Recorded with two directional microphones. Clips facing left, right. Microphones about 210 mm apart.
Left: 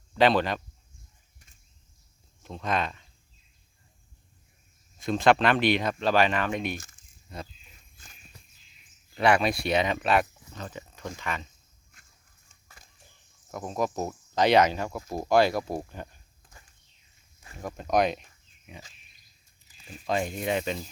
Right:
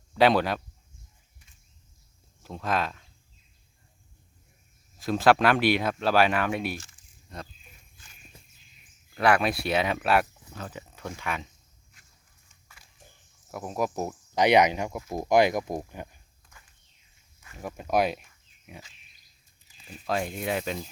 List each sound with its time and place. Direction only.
0.1 s speech: 10° right (ahead or behind)
2.4 s speech: 5° right (ahead or behind)
4.9 s speech: 5° right (ahead or behind)
6.7 s speech: 40° left (ahead or behind)
7.3 s speech: 5° left (ahead or behind)
9.1 s speech: centre (ahead or behind)
12.6 s fowl: 45° left (ahead or behind)
13.5 s speech: 10° right (ahead or behind)
17.6 s speech: 10° right (ahead or behind)
20.1 s speech: centre (ahead or behind)